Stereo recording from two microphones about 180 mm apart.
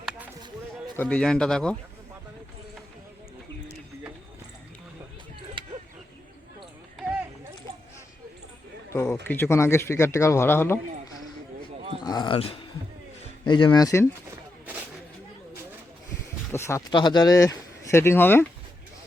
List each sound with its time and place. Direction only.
0.9 s speech: 5° left (ahead or behind)
5.6 s mechanisms: 30° right (ahead or behind)
8.9 s speech: 15° left (ahead or behind)
12.0 s speech: 25° left (ahead or behind)
16.5 s speech: 15° left (ahead or behind)